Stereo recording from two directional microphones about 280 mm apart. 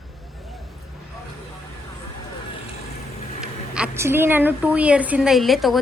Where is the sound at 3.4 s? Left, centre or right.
Centre.